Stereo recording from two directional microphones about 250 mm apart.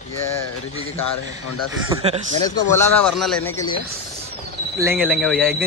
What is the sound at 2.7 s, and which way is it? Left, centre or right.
Speech, centre.